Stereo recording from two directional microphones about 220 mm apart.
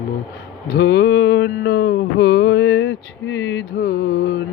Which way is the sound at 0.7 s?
45° left (ahead or behind).